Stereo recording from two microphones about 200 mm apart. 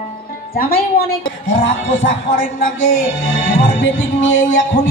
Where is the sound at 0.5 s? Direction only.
45° left (ahead or behind).